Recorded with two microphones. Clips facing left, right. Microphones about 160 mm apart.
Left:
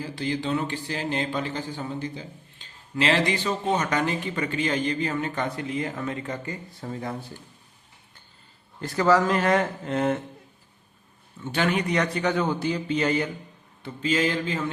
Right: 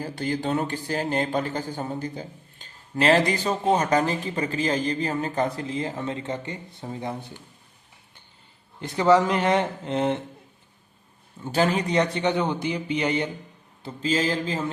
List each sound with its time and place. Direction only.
0.0 s speech: 45° right (ahead or behind); by 7.2 s 20° right (ahead or behind)
8.8 s a man's voice: 20° right (ahead or behind)
11.4 s a man's voice: 35° right (ahead or behind)
13.8 s speech: 35° right (ahead or behind)